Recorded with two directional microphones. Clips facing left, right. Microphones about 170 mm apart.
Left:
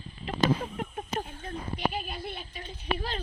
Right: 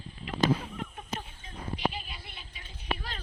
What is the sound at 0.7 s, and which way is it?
Speech, 45° left (ahead or behind).